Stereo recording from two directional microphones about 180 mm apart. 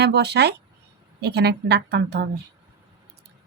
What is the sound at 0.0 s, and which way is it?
A woman's voice, 65° right (ahead or behind).